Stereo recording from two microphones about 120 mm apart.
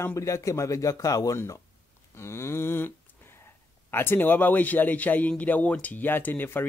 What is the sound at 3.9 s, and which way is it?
A man's voice, 15° left (ahead or behind).